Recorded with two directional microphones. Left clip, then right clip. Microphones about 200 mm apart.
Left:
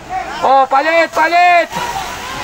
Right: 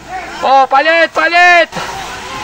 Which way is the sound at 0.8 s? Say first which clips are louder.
Right 2 dB; 10° right (ahead or behind).